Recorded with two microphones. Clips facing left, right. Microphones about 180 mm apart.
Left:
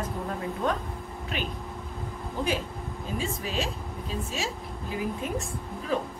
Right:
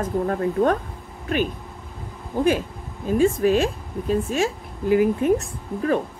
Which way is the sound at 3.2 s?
55° right (ahead or behind).